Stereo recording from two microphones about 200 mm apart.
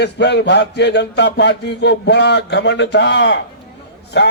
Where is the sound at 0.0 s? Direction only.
55° left (ahead or behind).